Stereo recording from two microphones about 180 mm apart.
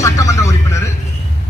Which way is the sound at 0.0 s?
15° left (ahead or behind).